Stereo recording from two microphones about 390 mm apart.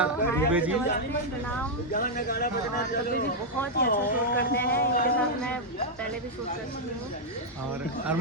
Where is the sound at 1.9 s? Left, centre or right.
Left.